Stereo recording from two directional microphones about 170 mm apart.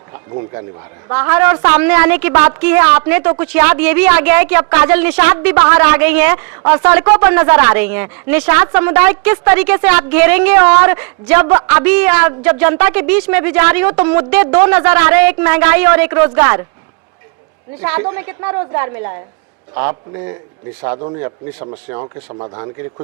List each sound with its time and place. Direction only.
1.1 s speech: 10° right (ahead or behind)
17.7 s speech: 10° right (ahead or behind); by 23.0 s 25° right (ahead or behind)